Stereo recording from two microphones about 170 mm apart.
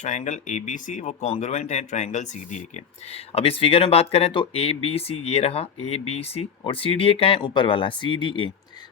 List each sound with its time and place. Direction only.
0.0 s speech: 45° left (ahead or behind); by 8.4 s 30° left (ahead or behind)